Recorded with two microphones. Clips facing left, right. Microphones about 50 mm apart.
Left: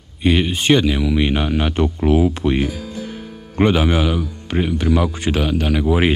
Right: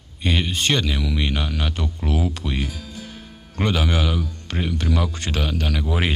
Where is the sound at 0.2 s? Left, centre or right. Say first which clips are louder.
Left 6 dB; centre.